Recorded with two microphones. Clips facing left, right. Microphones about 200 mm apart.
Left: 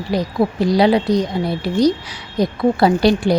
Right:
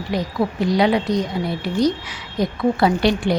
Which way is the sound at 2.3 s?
35° left (ahead or behind).